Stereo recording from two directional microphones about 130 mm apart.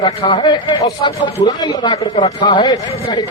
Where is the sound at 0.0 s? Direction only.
40° left (ahead or behind).